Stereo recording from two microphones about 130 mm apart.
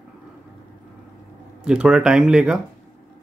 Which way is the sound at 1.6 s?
5° right (ahead or behind).